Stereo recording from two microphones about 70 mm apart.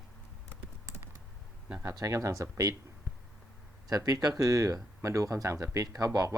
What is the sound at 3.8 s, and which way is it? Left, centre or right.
Speech, right.